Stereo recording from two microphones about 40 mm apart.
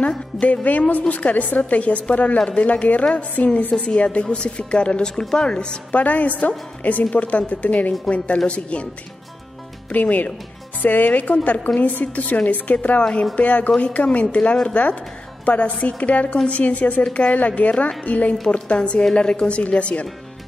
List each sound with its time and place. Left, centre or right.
0.7 s a woman's voice: left
5.9 s a woman's voice: left
9.8 s a woman's voice: left
18.8 s a woman's voice: left